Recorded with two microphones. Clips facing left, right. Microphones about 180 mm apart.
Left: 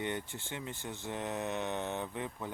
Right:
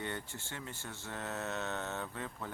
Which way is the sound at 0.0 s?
20° left (ahead or behind).